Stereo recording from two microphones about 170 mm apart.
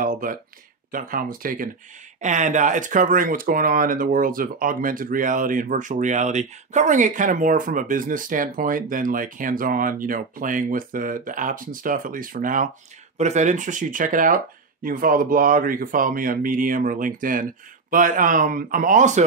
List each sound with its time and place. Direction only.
0.0 s speech: 55° right (ahead or behind)
2.2 s speech: 45° right (ahead or behind)